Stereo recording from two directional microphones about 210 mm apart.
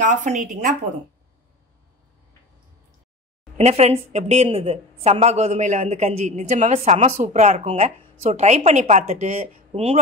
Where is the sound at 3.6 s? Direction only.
30° right (ahead or behind).